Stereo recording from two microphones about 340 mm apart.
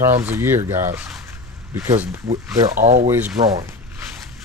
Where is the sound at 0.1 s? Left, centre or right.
Centre.